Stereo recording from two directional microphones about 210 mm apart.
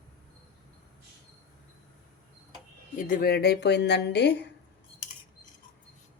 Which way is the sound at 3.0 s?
45° left (ahead or behind).